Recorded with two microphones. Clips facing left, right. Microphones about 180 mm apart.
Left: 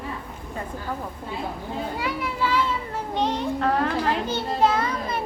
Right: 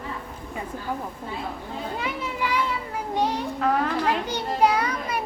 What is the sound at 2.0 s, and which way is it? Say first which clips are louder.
Children playing: left 2 dB; 20° right (ahead or behind).